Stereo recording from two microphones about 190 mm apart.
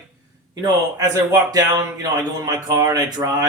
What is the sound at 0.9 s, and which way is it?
Speech, 20° right (ahead or behind).